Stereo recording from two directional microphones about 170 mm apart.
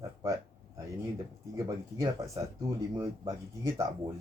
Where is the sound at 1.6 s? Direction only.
20° right (ahead or behind).